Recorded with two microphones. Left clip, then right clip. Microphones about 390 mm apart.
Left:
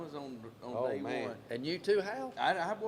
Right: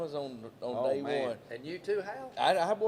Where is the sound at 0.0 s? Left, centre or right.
Right.